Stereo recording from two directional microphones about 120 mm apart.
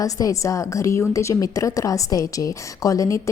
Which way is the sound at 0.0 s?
30° left (ahead or behind).